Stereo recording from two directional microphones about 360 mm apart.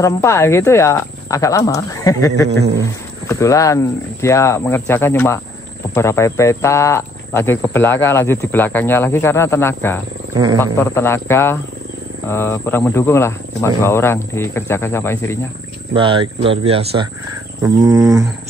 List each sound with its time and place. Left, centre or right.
0.0 s speech: centre
2.5 s a sound: right
2.8 s speech: centre
10.3 s speech: centre
10.6 s speech: centre
15.9 s speech: centre